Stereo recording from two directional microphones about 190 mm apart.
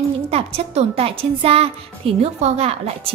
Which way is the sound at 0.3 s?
30° right (ahead or behind).